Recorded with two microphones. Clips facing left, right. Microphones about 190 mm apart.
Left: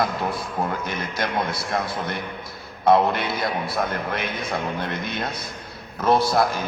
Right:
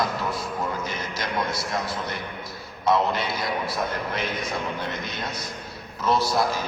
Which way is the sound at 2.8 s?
55° left (ahead or behind).